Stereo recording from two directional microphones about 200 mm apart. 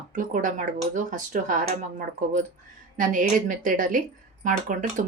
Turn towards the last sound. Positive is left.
turn(degrees=-40)  # may be behind; listen again after turning